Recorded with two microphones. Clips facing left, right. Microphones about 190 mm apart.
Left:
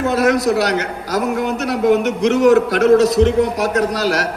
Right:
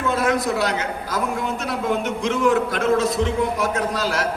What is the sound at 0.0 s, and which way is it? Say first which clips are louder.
A man's voice: left 6 dB; 75° left (ahead or behind).